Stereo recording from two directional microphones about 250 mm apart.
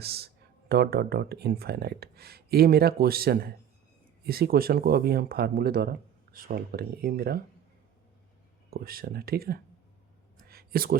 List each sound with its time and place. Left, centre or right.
0.0 s speech: right
8.7 s speech: right
10.5 s a sound: right